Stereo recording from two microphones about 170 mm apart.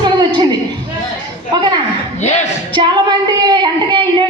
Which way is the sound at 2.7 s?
25° right (ahead or behind).